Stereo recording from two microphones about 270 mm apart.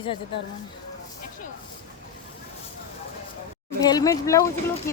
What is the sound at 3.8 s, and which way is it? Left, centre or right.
Speech, centre.